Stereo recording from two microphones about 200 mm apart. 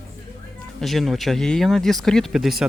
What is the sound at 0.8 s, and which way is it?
Speech, centre (ahead or behind).